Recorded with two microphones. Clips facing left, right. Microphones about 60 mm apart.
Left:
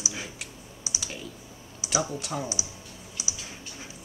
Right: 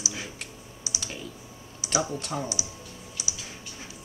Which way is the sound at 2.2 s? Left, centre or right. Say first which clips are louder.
Right 1 dB; centre.